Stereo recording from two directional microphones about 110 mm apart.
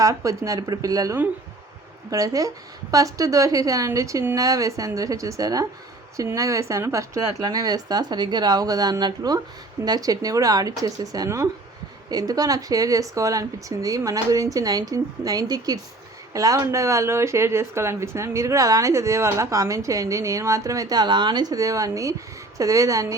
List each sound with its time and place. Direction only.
0.0 s speech: 30° right (ahead or behind)